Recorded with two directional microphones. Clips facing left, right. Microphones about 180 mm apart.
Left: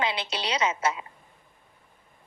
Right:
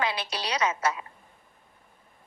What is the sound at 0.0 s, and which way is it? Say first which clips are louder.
A woman's voice: left 1 dB; 25° left (ahead or behind).